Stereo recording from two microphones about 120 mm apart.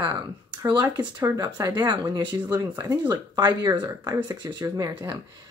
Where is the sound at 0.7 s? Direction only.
30° right (ahead or behind).